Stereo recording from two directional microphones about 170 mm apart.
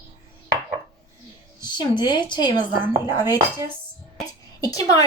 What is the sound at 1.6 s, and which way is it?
A woman's voice, 25° left (ahead or behind).